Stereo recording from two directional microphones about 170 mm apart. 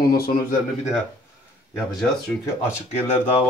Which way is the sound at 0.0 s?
60° left (ahead or behind).